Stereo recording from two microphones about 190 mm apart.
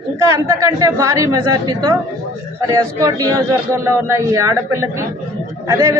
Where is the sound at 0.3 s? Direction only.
15° right (ahead or behind).